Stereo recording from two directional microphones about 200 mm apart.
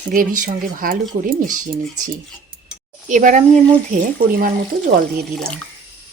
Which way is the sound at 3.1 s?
40° right (ahead or behind).